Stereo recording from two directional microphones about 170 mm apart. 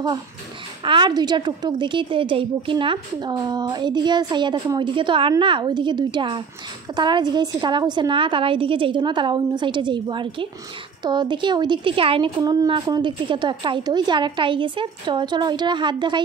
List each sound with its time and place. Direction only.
0.8 s a woman's voice: 25° right (ahead or behind)